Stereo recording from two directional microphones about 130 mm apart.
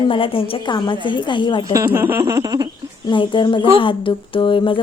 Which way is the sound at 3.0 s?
40° left (ahead or behind).